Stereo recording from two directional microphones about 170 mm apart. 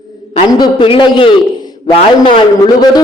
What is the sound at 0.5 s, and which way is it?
Speech, 30° left (ahead or behind).